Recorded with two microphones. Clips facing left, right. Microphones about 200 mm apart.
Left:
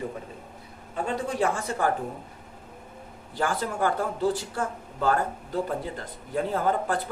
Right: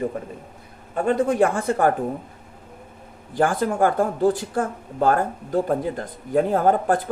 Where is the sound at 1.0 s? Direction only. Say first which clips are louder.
Right 8 dB; 55° right (ahead or behind).